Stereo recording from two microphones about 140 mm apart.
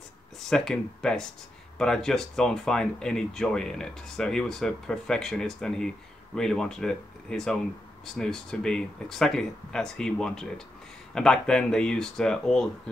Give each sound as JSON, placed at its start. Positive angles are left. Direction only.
{"t": 0.5, "sound": "speech", "side_deg": 5}